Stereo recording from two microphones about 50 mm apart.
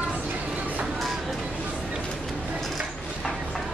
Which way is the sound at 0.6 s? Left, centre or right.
Right.